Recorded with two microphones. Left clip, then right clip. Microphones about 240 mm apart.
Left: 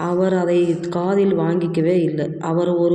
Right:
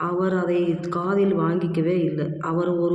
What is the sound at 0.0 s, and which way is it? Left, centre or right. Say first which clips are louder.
A man's voice: left 5 dB; centre.